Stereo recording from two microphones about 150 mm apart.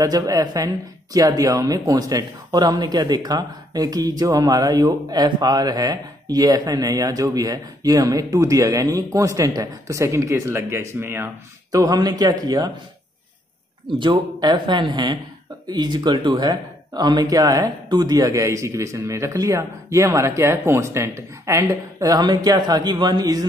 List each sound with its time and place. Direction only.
0.0 s speech: 25° right (ahead or behind)
13.8 s speech: 30° right (ahead or behind)